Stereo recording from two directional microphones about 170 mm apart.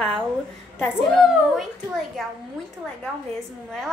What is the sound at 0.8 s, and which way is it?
Speech, 5° left (ahead or behind).